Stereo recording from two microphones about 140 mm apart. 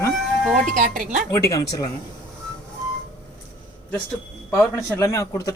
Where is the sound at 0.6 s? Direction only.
65° right (ahead or behind).